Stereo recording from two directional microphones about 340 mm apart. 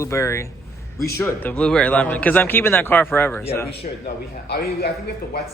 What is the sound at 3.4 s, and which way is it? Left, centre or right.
A man's voice, centre.